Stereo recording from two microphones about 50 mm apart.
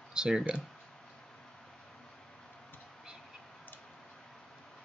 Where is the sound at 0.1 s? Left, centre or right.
Centre.